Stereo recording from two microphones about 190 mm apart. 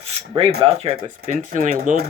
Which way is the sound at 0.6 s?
30° right (ahead or behind).